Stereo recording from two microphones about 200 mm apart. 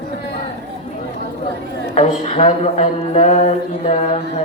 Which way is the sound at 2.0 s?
35° left (ahead or behind).